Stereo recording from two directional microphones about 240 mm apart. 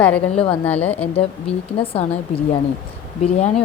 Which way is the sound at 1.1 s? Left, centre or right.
Left.